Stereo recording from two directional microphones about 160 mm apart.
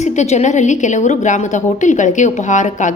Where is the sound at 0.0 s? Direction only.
45° left (ahead or behind).